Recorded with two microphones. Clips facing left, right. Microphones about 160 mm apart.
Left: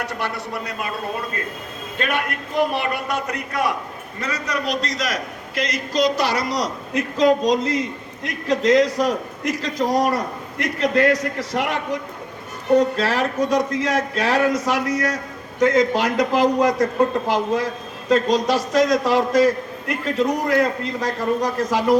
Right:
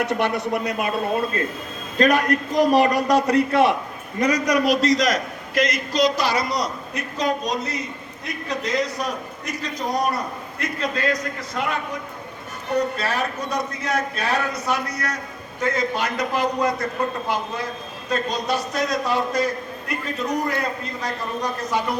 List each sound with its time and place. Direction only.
0.0 s speech: 20° right (ahead or behind)
2.0 s a man's voice: 40° right (ahead or behind)
4.2 s a man's voice: 15° right (ahead or behind); by 5.2 s 5° left (ahead or behind)
5.5 s speech: 35° left (ahead or behind)
5.9 s a man's voice: 60° left (ahead or behind); by 10.2 s 90° left
10.9 s a man's voice: 75° left (ahead or behind)
13.0 s a man's voice: 90° left